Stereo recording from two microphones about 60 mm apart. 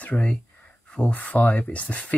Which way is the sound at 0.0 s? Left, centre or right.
Left.